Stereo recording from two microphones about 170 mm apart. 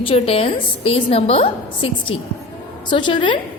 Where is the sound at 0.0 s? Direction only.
35° left (ahead or behind).